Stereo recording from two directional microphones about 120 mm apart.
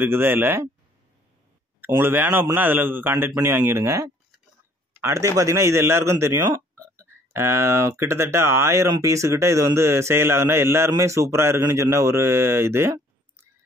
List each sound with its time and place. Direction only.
0.0 s speech: 20° right (ahead or behind)
2.0 s a man's voice: 20° right (ahead or behind)